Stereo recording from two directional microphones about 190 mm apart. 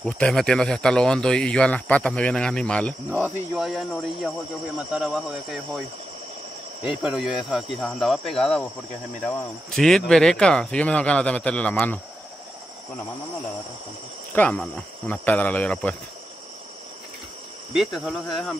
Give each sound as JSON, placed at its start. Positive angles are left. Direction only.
{"t": 0.0, "sound": "speech", "side_deg": 0}
{"t": 3.1, "sound": "speech", "side_deg": -10}
{"t": 7.0, "sound": "speech", "side_deg": -5}
{"t": 14.3, "sound": "speech", "side_deg": 5}
{"t": 17.7, "sound": "speech", "side_deg": 0}